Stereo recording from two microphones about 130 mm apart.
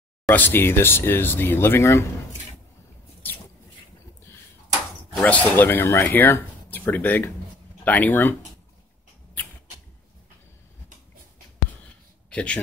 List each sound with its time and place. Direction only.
0.3 s speech: 15° left (ahead or behind)
5.2 s speech: 10° left (ahead or behind)
12.3 s a man's voice: 10° left (ahead or behind)